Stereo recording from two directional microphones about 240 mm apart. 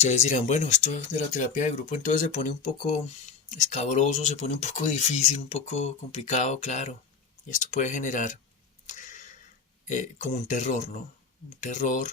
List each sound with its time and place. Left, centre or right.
0.0 s speech: left
8.9 s a sound: left
9.8 s speech: left